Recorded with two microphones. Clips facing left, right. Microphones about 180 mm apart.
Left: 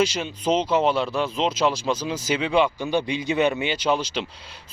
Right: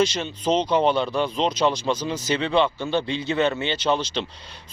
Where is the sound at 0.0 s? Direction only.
10° left (ahead or behind).